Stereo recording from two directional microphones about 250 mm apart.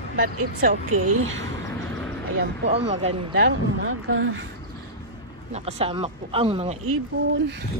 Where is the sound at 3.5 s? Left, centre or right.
Right.